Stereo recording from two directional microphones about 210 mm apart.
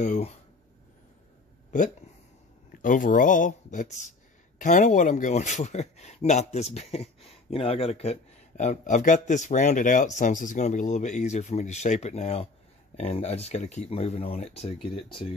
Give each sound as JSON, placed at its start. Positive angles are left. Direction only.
{"t": 0.0, "sound": "speech", "side_deg": 35}
{"t": 2.8, "sound": "speech", "side_deg": 40}